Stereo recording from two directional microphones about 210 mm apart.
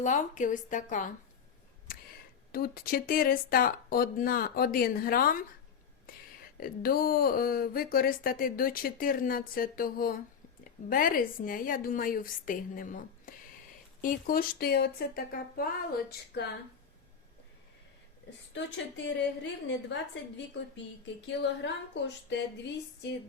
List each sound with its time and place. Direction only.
0.0 s a woman's voice: 35° left (ahead or behind)
2.5 s speech: 45° left (ahead or behind)
6.6 s a woman's voice: 45° left (ahead or behind)
19.0 s a woman's voice: 60° left (ahead or behind)